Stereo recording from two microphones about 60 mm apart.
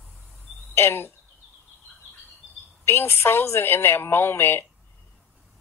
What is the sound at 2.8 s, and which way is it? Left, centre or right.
A woman's voice, left.